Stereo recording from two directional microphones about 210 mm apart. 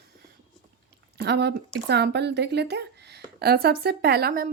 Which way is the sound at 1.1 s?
50° right (ahead or behind).